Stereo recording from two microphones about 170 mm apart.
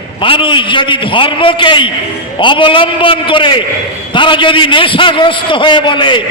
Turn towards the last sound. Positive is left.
turn(degrees=30)  # may be behind; listen again after turning